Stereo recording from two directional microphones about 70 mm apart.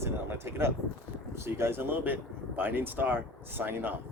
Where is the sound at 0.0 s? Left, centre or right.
Right.